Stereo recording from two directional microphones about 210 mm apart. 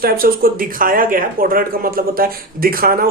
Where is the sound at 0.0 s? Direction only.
45° right (ahead or behind).